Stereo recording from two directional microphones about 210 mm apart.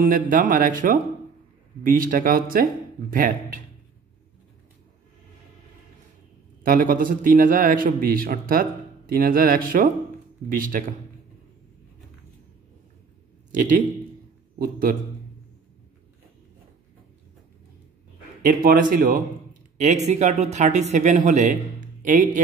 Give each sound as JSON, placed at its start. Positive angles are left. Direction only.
{"t": 0.0, "sound": "a man's voice", "side_deg": -40}
{"t": 6.6, "sound": "a man's voice", "side_deg": -40}
{"t": 13.5, "sound": "a man's voice", "side_deg": -40}
{"t": 18.4, "sound": "a man's voice", "side_deg": -40}
{"t": 20.1, "sound": "a man's voice", "side_deg": -35}